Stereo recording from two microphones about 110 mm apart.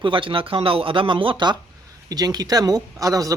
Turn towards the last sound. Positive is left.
turn(degrees=-30)  # may be behind; listen again after turning